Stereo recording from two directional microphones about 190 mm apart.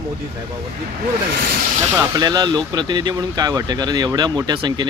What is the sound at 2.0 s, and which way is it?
Speech, 20° right (ahead or behind).